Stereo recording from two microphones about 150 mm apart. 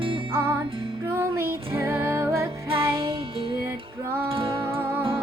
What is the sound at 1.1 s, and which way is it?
Music, 15° right (ahead or behind).